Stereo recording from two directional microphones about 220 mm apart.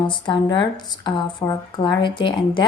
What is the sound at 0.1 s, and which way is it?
Speech, 20° left (ahead or behind).